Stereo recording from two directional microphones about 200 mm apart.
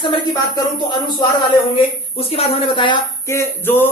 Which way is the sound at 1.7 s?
30° left (ahead or behind).